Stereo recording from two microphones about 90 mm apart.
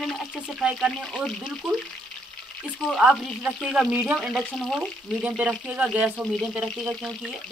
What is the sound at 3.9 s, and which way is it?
Speech, 20° right (ahead or behind).